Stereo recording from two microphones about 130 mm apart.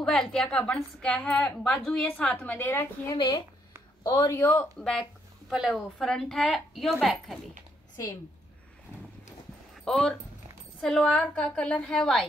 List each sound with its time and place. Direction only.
0.0 s a woman's voice: 5° left (ahead or behind)
3.2 s speech: 30° left (ahead or behind)
4.7 s a woman's voice: 5° left (ahead or behind)
9.8 s a woman's voice: 5° left (ahead or behind)